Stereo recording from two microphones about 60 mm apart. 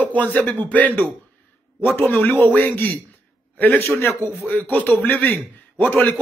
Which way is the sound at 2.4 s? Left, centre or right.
Left.